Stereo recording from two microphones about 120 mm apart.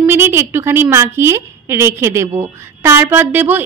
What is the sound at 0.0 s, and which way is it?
Speech, 20° right (ahead or behind).